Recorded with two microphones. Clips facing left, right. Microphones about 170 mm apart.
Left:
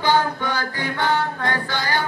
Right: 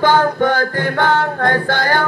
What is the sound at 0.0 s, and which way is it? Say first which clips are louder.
Music: right 6 dB; 50° right (ahead or behind).